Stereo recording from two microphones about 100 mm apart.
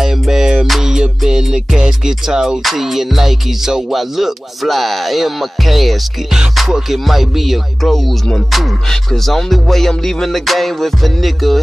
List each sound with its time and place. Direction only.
0.0 s music: 5° right (ahead or behind)